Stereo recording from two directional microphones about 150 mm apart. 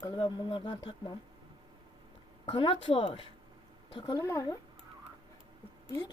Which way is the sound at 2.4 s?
35° left (ahead or behind).